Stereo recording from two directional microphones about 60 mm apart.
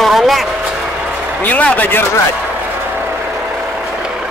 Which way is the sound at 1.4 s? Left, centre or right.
Left.